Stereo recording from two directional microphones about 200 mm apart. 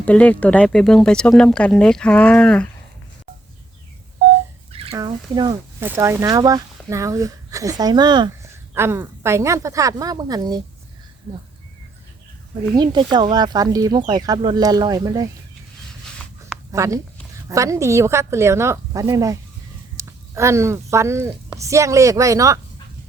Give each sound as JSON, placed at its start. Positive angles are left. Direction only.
{"t": 0.0, "sound": "speech", "side_deg": 5}
{"t": 4.9, "sound": "speech", "side_deg": -20}
{"t": 12.7, "sound": "speech", "side_deg": -20}
{"t": 16.7, "sound": "speech", "side_deg": -15}